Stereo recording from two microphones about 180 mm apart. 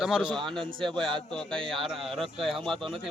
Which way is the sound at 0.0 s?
5° right (ahead or behind).